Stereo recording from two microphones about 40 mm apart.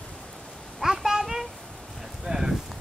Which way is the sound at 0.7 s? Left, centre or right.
Centre.